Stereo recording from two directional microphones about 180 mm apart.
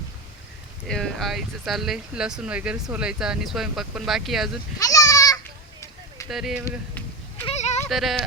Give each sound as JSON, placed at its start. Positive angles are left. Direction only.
{"t": 0.9, "sound": "speech", "side_deg": 0}
{"t": 4.8, "sound": "goat", "side_deg": 20}
{"t": 6.2, "sound": "speech", "side_deg": -5}
{"t": 6.7, "sound": "goat", "side_deg": 10}
{"t": 7.4, "sound": "a sound", "side_deg": 40}
{"t": 7.9, "sound": "yodeling", "side_deg": 0}